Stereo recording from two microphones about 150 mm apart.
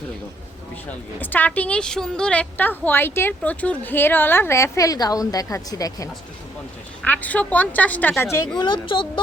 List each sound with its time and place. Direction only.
0.9 s a woman's voice: 10° left (ahead or behind)
7.0 s a woman's voice: 10° left (ahead or behind)
8.5 s speech: 30° left (ahead or behind)